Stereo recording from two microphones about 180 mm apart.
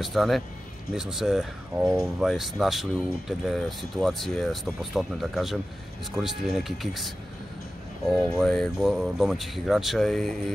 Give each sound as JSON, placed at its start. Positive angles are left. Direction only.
{"t": 0.0, "sound": "speech", "side_deg": 0}
{"t": 8.2, "sound": "speech", "side_deg": 0}